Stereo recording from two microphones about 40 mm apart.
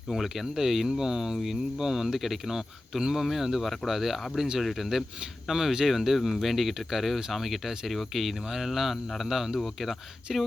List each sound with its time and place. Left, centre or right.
0.1 s speech: centre